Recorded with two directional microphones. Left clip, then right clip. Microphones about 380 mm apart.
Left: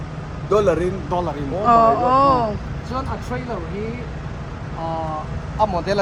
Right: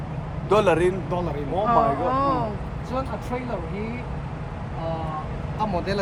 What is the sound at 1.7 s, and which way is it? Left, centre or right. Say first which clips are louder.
Speech: left 8 dB; centre.